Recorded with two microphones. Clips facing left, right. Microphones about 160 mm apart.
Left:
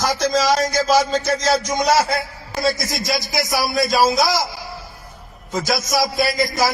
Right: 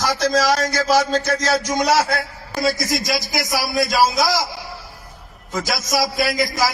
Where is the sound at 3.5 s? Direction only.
Centre (ahead or behind).